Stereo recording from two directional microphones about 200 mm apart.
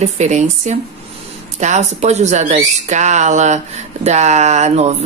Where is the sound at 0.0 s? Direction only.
35° right (ahead or behind).